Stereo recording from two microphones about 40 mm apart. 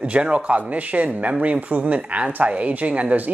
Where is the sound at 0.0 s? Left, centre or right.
Right.